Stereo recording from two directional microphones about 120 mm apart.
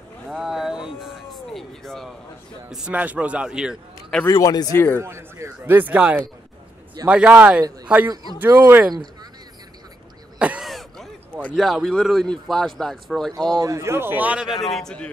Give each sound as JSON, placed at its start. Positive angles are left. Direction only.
{"t": 0.3, "sound": "a sound", "side_deg": -5}
{"t": 2.7, "sound": "a man's voice", "side_deg": -10}
{"t": 4.3, "sound": "speech", "side_deg": 30}
{"t": 4.7, "sound": "speech", "side_deg": 15}
{"t": 5.0, "sound": "a man's voice", "side_deg": -20}
{"t": 10.4, "sound": "throat clearing", "side_deg": -10}
{"t": 10.7, "sound": "throat clearing", "side_deg": 0}
{"t": 11.5, "sound": "speech", "side_deg": 0}
{"t": 13.6, "sound": "a man's voice", "side_deg": -25}